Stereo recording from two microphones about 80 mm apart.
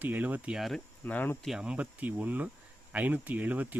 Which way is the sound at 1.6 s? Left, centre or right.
Centre.